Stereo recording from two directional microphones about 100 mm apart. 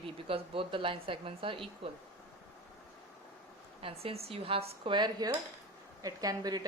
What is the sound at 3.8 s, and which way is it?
A woman's voice, 80° right.